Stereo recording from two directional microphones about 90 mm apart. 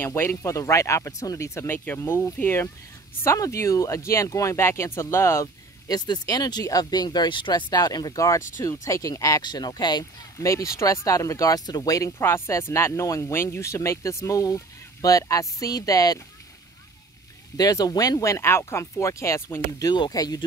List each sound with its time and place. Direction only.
0.0 s speech: 25° left (ahead or behind)
5.9 s speech: 50° left (ahead or behind)
9.4 s speech: 50° left (ahead or behind)
10.4 s speech: 35° left (ahead or behind)
12.2 s speech: 25° left (ahead or behind)
17.6 s speech: 45° left (ahead or behind)
19.8 s speech: 50° left (ahead or behind)